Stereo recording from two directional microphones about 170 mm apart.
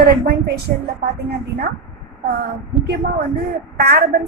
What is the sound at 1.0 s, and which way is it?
Speech, 70° right (ahead or behind).